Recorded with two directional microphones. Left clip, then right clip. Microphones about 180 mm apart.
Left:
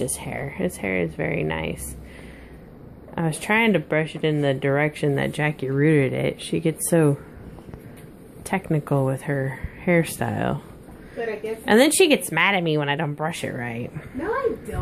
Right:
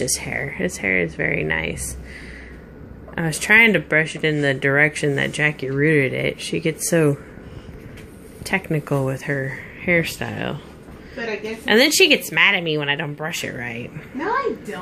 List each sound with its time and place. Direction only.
0.0 s speech: 10° left (ahead or behind)
3.2 s speech: 10° left (ahead or behind)
8.5 s speech: 15° left (ahead or behind)
11.6 s speech: 25° left (ahead or behind)